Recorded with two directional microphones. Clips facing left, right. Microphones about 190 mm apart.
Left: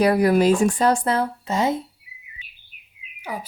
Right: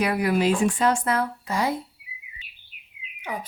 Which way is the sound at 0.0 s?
40° left (ahead or behind).